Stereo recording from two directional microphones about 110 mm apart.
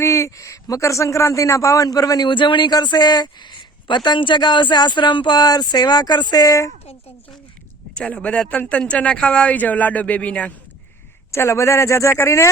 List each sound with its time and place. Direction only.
0.0 s a man's voice: 25° left (ahead or behind)
2.3 s speech: 45° left (ahead or behind); by 6.7 s 30° left (ahead or behind)
7.9 s speech: 10° left (ahead or behind)
11.3 s a man's voice: 25° left (ahead or behind)